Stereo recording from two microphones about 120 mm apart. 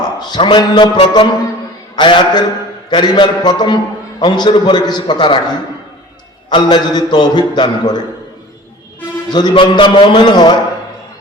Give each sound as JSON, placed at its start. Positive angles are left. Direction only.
{"t": 0.0, "sound": "a sound", "side_deg": 35}
{"t": 2.0, "sound": "mantra", "side_deg": 40}
{"t": 2.9, "sound": "a man's voice", "side_deg": 40}
{"t": 9.3, "sound": "a man's voice", "side_deg": 40}